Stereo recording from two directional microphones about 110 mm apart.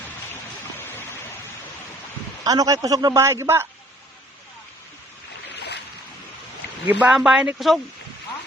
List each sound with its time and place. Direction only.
0.8 s stream: 20° left (ahead or behind)
2.4 s a man's voice: 35° right (ahead or behind)
6.8 s speech: 10° right (ahead or behind)